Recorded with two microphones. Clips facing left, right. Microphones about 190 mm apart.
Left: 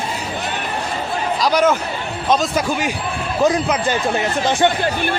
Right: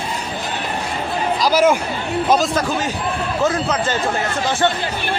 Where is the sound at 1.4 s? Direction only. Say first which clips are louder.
Right 1 dB; 5° right (ahead or behind).